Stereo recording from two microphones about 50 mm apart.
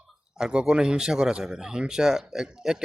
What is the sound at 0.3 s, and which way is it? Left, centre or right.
Speech, centre.